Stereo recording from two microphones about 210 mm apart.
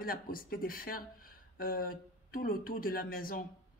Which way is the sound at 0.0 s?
45° left (ahead or behind).